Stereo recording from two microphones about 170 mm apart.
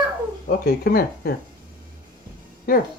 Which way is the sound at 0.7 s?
65° left (ahead or behind).